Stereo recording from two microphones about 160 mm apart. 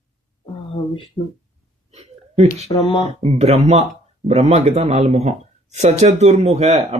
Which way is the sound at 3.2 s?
40° right (ahead or behind).